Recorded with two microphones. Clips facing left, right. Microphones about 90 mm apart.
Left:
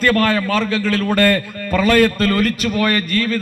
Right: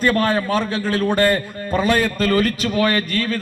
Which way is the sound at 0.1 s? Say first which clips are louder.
Left 2 dB; 5° right (ahead or behind).